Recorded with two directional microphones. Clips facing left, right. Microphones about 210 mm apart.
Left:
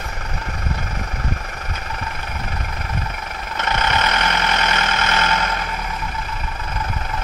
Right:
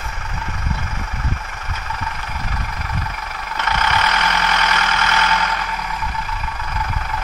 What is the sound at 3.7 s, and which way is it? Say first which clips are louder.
Vehicle: even; 25° left (ahead or behind).